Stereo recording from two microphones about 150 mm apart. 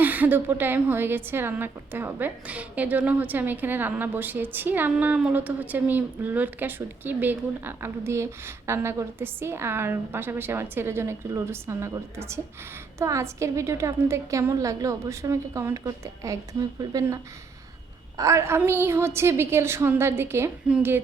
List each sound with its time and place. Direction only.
0.0 s a woman's voice: 10° right (ahead or behind)
18.2 s a woman's voice: 20° right (ahead or behind)